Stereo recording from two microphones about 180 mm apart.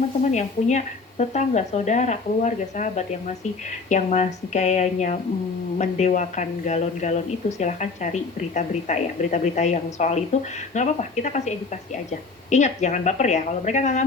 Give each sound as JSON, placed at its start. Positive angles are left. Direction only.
{"t": 0.3, "sound": "speech", "side_deg": 40}